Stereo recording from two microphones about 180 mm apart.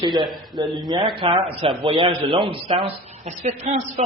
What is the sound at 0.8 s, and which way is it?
A man's voice, 25° right (ahead or behind).